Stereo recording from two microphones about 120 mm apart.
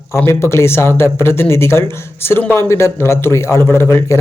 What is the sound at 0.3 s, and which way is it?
Speech, 20° left (ahead or behind).